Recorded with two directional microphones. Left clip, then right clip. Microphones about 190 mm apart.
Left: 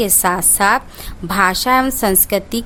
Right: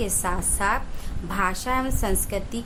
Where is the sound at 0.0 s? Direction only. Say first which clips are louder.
Left 11 dB; 45° left (ahead or behind).